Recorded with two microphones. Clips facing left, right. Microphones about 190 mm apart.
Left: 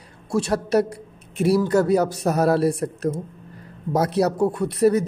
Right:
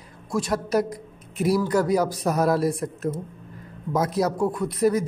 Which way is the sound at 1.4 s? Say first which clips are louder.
Left 3 dB; 30° left (ahead or behind).